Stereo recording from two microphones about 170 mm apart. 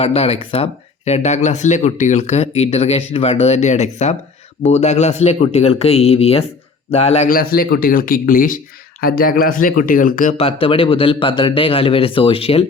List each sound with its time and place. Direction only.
0.0 s speech: 35° left (ahead or behind)
7.3 s speech: 60° left (ahead or behind)
10.3 s speech: 35° left (ahead or behind)